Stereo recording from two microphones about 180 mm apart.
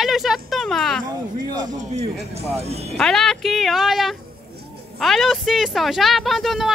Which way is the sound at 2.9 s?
5° left (ahead or behind).